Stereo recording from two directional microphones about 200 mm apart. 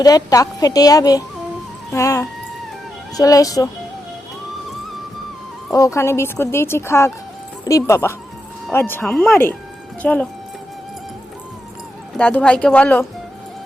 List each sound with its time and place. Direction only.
0.0 s a woman's voice: 20° left (ahead or behind)
5.7 s speech: 15° left (ahead or behind)
12.1 s speech: 5° left (ahead or behind)